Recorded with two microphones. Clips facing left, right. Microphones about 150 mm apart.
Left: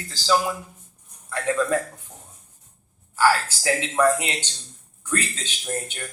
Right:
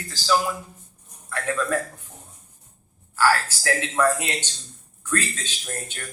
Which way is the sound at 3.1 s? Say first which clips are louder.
Left 1 dB; 15° left (ahead or behind).